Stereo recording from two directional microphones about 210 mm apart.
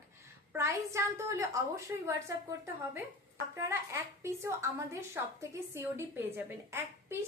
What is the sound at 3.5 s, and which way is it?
A woman's voice, 10° right (ahead or behind).